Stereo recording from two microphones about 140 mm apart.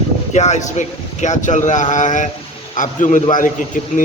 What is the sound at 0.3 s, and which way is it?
A man's voice, 55° left (ahead or behind).